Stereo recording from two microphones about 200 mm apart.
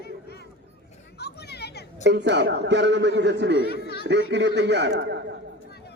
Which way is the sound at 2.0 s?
60° right (ahead or behind).